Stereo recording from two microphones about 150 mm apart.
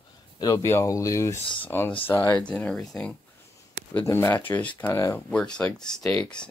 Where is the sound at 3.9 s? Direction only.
15° left (ahead or behind).